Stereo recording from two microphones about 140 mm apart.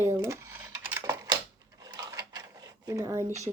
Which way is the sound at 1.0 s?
25° right (ahead or behind).